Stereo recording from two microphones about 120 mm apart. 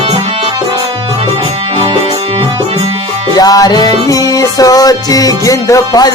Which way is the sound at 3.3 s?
30° left (ahead or behind).